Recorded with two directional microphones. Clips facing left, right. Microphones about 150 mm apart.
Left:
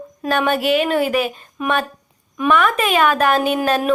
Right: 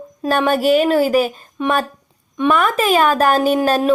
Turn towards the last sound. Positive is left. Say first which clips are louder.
# right 3 dB
turn(degrees=-30)  # may be behind; listen again after turning